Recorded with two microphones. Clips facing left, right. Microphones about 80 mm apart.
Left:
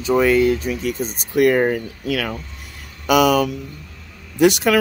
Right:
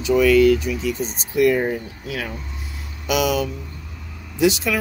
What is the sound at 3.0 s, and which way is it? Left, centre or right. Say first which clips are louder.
Speech: left 5 dB; left.